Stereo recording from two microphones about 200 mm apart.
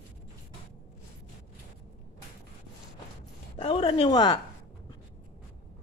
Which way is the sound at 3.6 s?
25° left (ahead or behind).